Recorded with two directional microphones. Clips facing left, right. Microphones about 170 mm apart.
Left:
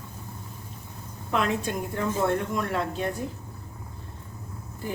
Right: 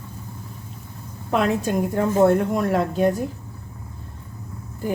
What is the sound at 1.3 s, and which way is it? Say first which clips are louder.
A woman's voice: right 6 dB; 40° right (ahead or behind).